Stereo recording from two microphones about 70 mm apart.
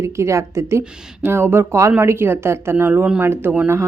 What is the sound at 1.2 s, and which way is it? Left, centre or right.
Speech, right.